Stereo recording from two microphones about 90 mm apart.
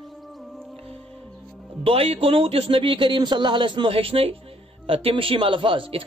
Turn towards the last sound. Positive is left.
turn(degrees=-80)